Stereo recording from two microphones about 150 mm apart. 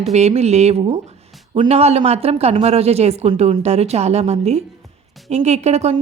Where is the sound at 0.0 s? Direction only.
45° right (ahead or behind).